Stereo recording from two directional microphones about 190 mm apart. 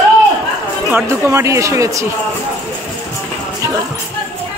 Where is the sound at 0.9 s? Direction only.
15° right (ahead or behind).